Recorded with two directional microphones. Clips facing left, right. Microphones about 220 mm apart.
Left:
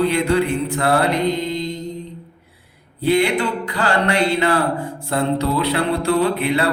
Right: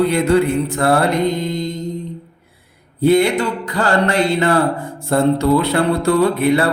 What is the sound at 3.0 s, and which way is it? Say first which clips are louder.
Mantra: right 4 dB; 45° right (ahead or behind).